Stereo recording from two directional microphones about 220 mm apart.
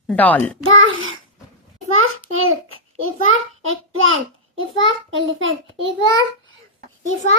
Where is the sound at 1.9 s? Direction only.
70° right (ahead or behind).